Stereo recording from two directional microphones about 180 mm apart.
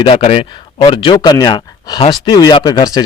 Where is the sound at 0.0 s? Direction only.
35° left (ahead or behind).